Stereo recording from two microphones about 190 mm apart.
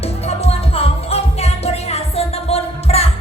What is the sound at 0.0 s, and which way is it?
Music, 35° left (ahead or behind).